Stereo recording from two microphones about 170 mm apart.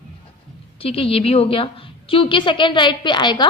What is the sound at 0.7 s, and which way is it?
A woman's voice, 35° left (ahead or behind).